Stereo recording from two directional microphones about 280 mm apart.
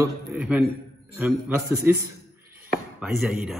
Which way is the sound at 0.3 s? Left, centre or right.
Centre.